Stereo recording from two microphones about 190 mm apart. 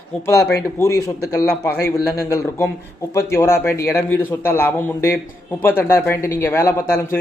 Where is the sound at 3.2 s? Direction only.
15° left (ahead or behind).